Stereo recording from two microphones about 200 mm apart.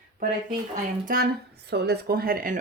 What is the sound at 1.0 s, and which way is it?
Speech, 45° right (ahead or behind).